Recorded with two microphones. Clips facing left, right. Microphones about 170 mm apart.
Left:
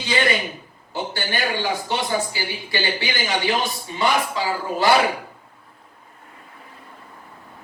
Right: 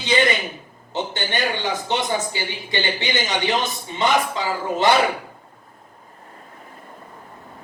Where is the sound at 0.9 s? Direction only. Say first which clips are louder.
Right 1 dB; 20° right (ahead or behind).